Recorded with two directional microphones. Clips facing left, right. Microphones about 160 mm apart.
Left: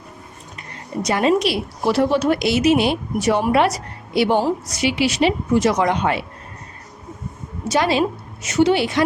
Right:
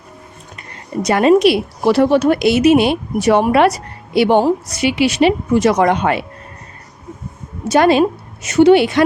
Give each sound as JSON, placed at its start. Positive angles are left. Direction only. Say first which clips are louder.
{"t": 1.0, "sound": "a woman's voice", "louder": "right 7 dB", "side_deg": -60}
{"t": 7.7, "sound": "a woman's voice", "louder": "right 7 dB", "side_deg": -55}